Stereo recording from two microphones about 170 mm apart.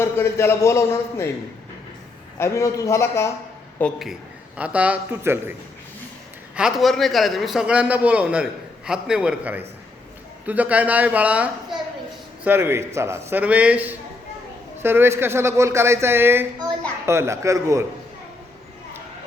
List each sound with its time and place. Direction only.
0.0 s a man's voice: 15° left (ahead or behind)
2.4 s a man's voice: 20° left (ahead or behind)
3.8 s a man's voice: 5° left (ahead or behind); by 5.5 s 15° right (ahead or behind)
6.6 s a man's voice: centre (ahead or behind); by 17.8 s 20° right (ahead or behind)